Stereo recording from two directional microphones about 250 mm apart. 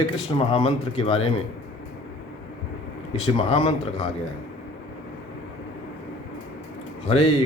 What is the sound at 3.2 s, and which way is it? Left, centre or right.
Speech, left.